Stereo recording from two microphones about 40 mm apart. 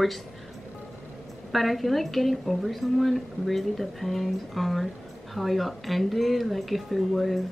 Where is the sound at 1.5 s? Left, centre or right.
Centre.